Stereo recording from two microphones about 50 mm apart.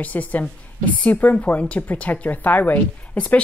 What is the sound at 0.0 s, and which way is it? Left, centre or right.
A woman's voice, left.